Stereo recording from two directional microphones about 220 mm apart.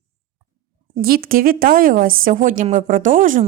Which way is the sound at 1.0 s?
45° right (ahead or behind).